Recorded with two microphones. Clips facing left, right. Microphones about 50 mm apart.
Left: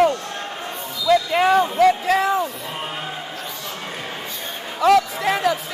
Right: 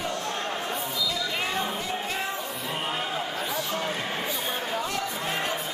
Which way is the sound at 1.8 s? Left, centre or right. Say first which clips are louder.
Left 14 dB; left.